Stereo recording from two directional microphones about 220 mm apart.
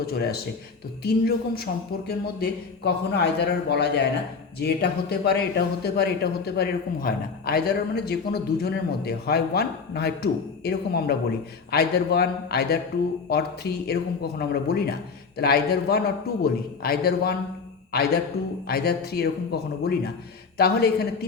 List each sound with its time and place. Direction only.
0.0 s a man's voice: 45° left (ahead or behind)